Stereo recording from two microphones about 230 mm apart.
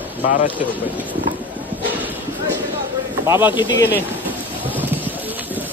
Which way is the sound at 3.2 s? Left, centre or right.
Centre.